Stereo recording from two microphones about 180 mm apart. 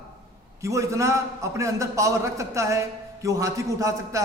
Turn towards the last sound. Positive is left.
turn(degrees=-20)  # may be behind; listen again after turning